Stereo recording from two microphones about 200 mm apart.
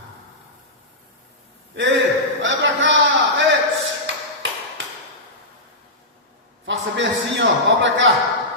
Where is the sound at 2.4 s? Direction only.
65° right (ahead or behind).